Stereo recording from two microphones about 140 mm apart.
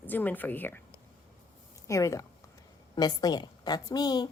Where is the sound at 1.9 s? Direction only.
20° left (ahead or behind).